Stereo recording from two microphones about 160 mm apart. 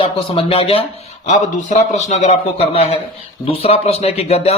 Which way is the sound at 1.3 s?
50° left (ahead or behind).